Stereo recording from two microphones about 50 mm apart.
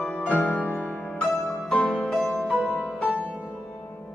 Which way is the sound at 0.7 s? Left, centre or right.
Left.